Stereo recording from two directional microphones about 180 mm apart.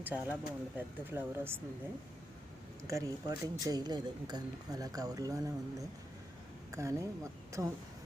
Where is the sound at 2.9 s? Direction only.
20° right (ahead or behind).